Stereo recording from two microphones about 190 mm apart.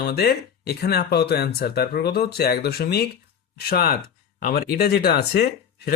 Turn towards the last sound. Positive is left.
turn(degrees=55)  # may be behind; listen again after turning